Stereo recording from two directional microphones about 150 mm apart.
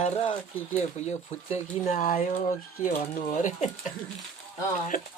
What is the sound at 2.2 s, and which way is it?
Speech, 50° left (ahead or behind).